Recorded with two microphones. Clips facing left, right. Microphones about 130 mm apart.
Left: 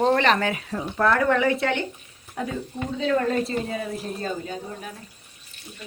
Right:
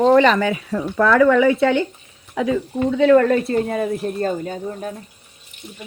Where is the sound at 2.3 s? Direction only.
90° right.